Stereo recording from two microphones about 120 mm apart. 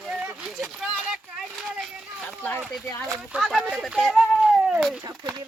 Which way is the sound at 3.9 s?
Centre (ahead or behind).